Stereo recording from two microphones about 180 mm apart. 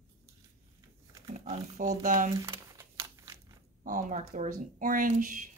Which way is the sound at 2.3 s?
20° right (ahead or behind).